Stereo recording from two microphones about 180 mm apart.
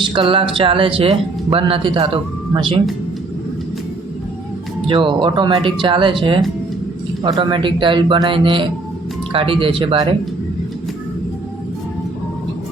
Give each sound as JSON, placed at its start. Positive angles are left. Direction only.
{"t": 0.0, "sound": "speech", "side_deg": -30}
{"t": 4.9, "sound": "speech", "side_deg": -30}
{"t": 7.3, "sound": "speech", "side_deg": -25}